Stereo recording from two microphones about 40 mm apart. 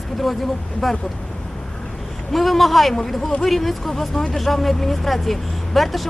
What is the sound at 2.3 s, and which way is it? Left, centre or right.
Speech, centre.